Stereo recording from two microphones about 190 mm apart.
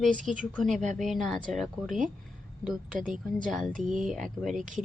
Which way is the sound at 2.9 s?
45° right (ahead or behind).